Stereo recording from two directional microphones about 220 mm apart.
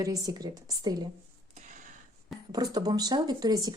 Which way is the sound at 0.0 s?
15° right (ahead or behind).